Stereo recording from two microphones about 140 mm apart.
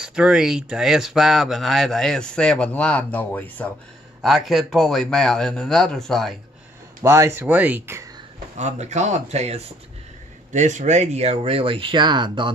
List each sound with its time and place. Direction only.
0.0 s speech: 5° right (ahead or behind); by 3.7 s 10° left (ahead or behind)
4.2 s speech: centre (ahead or behind)
7.0 s speech: 20° right (ahead or behind)
8.5 s speech: 55° right (ahead or behind); by 12.5 s 35° right (ahead or behind)